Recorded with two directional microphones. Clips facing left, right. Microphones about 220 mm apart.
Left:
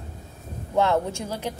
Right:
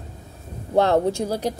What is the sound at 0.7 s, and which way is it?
Speech, 35° right (ahead or behind).